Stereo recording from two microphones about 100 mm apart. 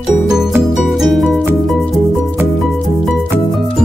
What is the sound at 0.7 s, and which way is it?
Music, centre (ahead or behind).